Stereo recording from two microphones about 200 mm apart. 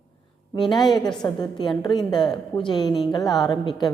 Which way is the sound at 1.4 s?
25° left (ahead or behind).